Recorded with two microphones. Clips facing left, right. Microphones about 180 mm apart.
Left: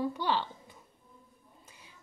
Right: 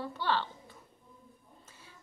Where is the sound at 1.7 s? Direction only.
15° left (ahead or behind).